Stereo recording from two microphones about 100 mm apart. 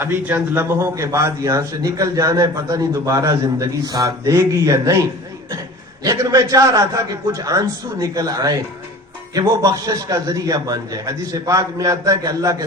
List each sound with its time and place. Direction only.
0.0 s a man's voice: 20° right (ahead or behind)
6.1 s a man's voice: 40° right (ahead or behind)